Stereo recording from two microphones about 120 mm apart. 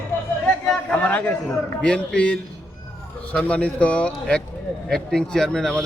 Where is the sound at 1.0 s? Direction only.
10° left (ahead or behind).